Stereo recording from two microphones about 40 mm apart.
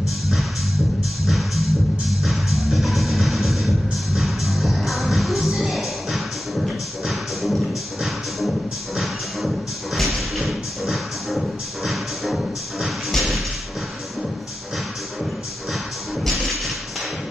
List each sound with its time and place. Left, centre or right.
0.0 s music: centre
13.1 s a sound: centre
15.7 s music: centre